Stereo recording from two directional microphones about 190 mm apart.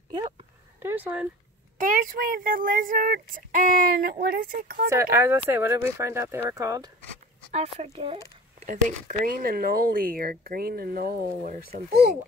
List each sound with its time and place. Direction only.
0.7 s speech: 10° right (ahead or behind)
1.8 s speech: 45° right (ahead or behind)
4.8 s speech: 15° right (ahead or behind)
7.5 s speech: 35° right (ahead or behind); by 11.8 s 50° right (ahead or behind)